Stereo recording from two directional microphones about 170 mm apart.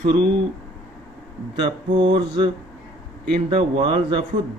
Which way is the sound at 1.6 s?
25° right (ahead or behind).